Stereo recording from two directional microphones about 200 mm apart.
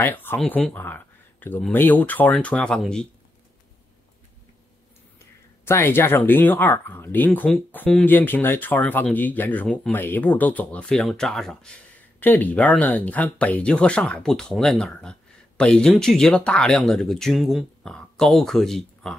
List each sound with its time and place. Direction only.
0.0 s speech: 10° left (ahead or behind)
5.2 s speech: 10° left (ahead or behind)